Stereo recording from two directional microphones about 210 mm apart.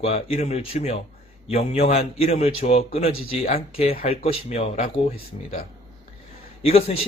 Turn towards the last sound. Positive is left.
turn(degrees=30)  # may be behind; listen again after turning